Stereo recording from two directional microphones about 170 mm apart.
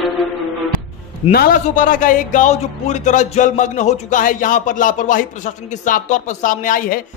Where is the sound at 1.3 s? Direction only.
55° left (ahead or behind).